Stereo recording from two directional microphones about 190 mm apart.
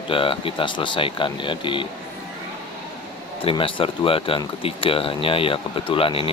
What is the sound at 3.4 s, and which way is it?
Speech, 25° left (ahead or behind).